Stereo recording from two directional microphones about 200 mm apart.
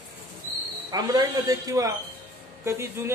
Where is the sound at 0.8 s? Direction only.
20° right (ahead or behind).